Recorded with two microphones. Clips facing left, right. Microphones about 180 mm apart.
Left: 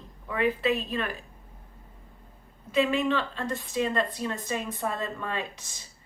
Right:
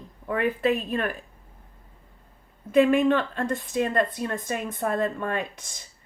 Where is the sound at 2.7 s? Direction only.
50° right (ahead or behind).